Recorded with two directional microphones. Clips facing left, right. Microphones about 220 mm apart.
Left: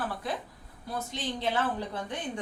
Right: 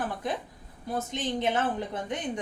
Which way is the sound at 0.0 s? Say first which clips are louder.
Right 2 dB; 20° right (ahead or behind).